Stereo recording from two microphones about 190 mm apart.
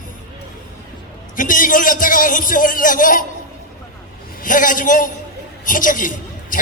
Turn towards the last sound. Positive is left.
turn(degrees=45)  # may be behind; listen again after turning